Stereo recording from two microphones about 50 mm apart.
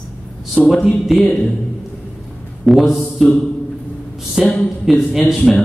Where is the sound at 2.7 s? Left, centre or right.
Centre.